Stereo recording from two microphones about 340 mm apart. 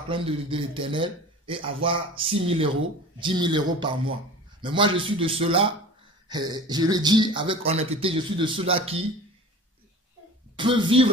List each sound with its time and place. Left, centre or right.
0.1 s a man's voice: centre
10.5 s speech: centre